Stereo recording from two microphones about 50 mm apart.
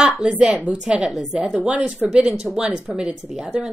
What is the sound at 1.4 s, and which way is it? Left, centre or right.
Speech, right.